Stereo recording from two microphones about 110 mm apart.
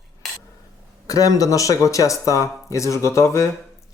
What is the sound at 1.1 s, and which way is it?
Speech, 30° left (ahead or behind).